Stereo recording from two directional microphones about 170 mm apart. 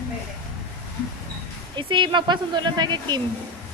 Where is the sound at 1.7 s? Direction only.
30° right (ahead or behind).